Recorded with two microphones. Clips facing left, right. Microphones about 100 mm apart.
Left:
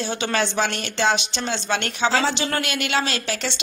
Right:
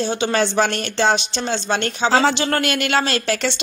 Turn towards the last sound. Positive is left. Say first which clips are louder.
# right 5 dB
turn(degrees=-50)  # may be behind; listen again after turning